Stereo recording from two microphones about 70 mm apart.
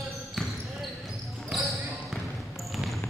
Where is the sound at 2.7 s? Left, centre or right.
Centre.